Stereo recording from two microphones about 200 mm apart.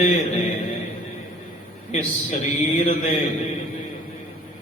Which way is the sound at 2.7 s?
30° left (ahead or behind).